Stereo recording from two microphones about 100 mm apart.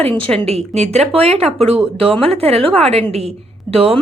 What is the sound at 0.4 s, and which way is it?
Speech, 90° right.